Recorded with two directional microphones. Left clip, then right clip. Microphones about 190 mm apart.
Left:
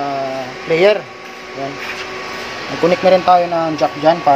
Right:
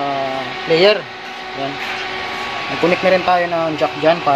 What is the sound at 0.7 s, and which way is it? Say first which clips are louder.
Speech: even; 5° left (ahead or behind).